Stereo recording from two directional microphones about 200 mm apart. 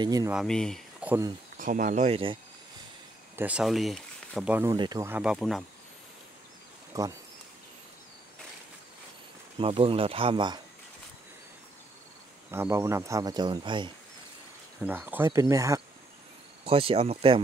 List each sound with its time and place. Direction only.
0.0 s speech: 20° right (ahead or behind)
0.3 s speech: centre (ahead or behind)
1.6 s speech: 40° right (ahead or behind)
3.3 s speech: 5° right (ahead or behind)
4.7 s speech: 20° right (ahead or behind); by 5.7 s centre (ahead or behind)
6.9 s speech: 15° right (ahead or behind)
9.6 s speech: 25° right (ahead or behind)
12.4 s speech: 15° right (ahead or behind)
14.8 s speech: 10° right (ahead or behind)
16.6 s speech: 30° right (ahead or behind)